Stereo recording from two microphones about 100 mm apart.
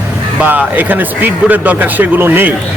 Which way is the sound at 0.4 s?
15° right (ahead or behind).